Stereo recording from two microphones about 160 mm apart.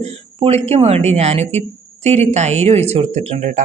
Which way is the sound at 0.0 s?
40° right (ahead or behind).